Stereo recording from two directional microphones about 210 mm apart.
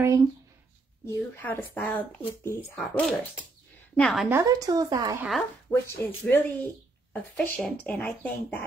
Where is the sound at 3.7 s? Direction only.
5° left (ahead or behind).